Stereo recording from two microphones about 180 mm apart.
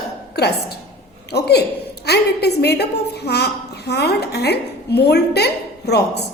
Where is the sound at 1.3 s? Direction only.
65° left (ahead or behind).